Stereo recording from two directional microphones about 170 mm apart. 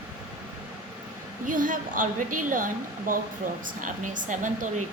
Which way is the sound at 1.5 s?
50° right (ahead or behind).